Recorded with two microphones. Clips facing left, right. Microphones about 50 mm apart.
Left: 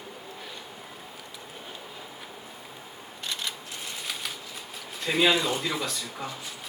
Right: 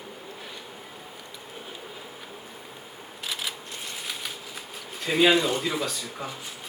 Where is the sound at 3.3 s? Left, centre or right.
Centre.